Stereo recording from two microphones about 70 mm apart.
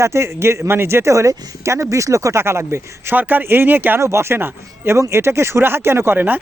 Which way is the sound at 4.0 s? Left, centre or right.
Right.